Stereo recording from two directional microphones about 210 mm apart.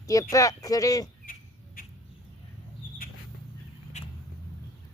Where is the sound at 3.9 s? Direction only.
35° left (ahead or behind).